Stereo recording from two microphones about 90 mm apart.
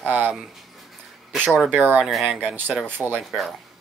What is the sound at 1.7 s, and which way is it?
Speech, 20° right (ahead or behind).